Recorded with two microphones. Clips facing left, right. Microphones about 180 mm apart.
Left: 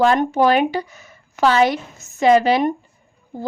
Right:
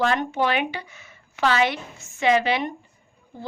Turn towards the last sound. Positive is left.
turn(degrees=40)  # may be behind; listen again after turning